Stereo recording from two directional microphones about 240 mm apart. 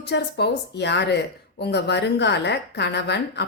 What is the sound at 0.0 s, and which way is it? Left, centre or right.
A woman's voice, left.